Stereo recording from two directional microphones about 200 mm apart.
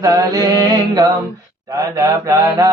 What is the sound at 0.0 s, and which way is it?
Mantra, 15° right (ahead or behind).